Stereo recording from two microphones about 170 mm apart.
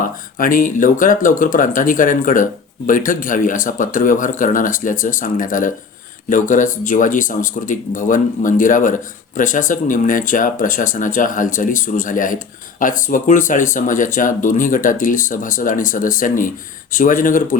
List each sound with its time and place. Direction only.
0.0 s speech: 55° left (ahead or behind)